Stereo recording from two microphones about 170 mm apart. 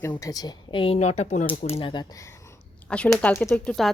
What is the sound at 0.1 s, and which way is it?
Speech, 20° left (ahead or behind).